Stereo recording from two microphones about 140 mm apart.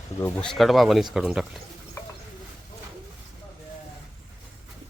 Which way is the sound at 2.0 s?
20° left (ahead or behind).